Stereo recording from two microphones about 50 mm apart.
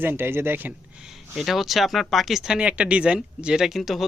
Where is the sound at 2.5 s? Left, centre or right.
Right.